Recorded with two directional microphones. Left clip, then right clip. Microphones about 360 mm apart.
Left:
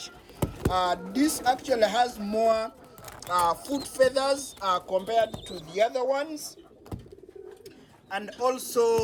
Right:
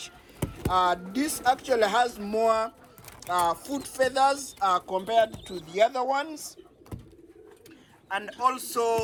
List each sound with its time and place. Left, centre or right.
0.0 s a sound: centre
1.1 s speech: centre
4.9 s speech: right
8.1 s speech: centre